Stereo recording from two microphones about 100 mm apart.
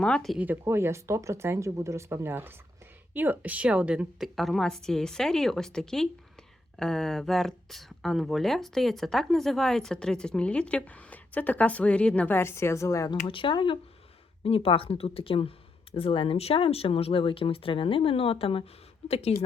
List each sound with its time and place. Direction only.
0.0 s a woman's voice: 5° left (ahead or behind)
0.3 s a woman's voice: 20° right (ahead or behind)
4.4 s a woman's voice: centre (ahead or behind); by 13.1 s 30° left (ahead or behind)
13.1 s speech: 60° left (ahead or behind)
14.4 s speech: 65° left (ahead or behind); by 19.5 s 90° left